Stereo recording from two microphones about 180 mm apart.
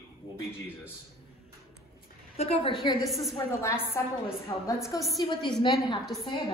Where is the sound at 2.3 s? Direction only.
35° left (ahead or behind).